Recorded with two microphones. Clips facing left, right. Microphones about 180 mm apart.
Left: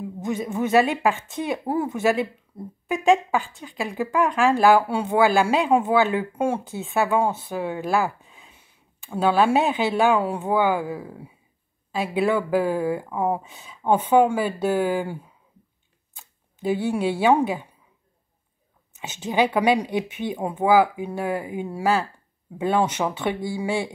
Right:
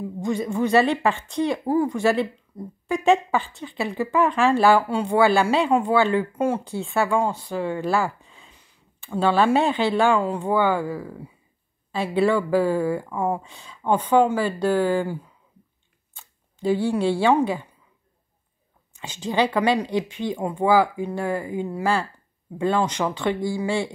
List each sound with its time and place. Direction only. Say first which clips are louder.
0.6 s speech: even; 5° left (ahead or behind)
8.2 s speech: even; centre (ahead or behind)
11.9 s speech: right 1 dB; 5° left (ahead or behind)
16.7 s speech: right 2 dB; 15° left (ahead or behind)
19.4 s speech: left 1 dB; 15° left (ahead or behind)